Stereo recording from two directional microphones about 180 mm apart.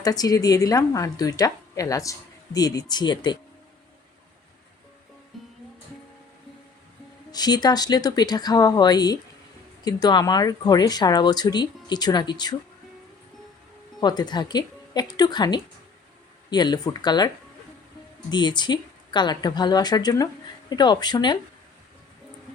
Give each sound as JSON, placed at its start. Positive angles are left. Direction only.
{"t": 0.0, "sound": "speech", "side_deg": 20}
{"t": 5.3, "sound": "music", "side_deg": 0}
{"t": 7.3, "sound": "speech", "side_deg": 20}
{"t": 14.0, "sound": "speech", "side_deg": 25}